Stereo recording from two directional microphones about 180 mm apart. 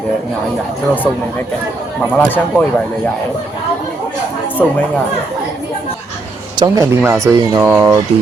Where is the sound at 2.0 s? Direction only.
10° left (ahead or behind).